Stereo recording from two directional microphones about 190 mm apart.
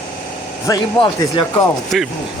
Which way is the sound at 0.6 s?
20° left (ahead or behind).